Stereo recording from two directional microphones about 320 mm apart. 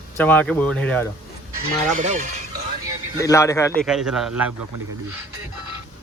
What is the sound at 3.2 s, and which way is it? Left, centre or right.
Speech, centre.